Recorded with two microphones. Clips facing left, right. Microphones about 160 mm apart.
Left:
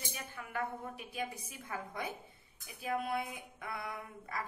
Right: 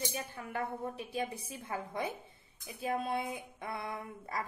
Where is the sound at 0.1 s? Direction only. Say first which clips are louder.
Right 3 dB; 30° right (ahead or behind).